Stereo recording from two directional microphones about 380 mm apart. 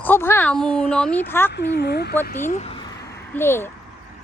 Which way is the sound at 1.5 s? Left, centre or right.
Left.